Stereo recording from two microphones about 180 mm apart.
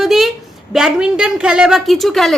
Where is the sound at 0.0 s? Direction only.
Centre (ahead or behind).